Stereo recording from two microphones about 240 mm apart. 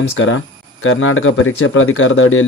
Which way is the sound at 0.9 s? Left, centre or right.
Left.